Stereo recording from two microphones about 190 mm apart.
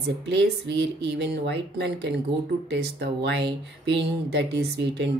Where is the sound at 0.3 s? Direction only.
65° right (ahead or behind).